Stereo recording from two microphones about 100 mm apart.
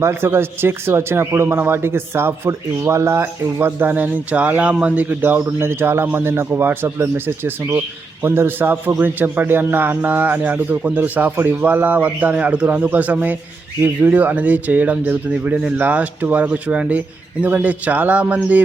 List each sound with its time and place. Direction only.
0.0 s a man's voice: 25° right (ahead or behind)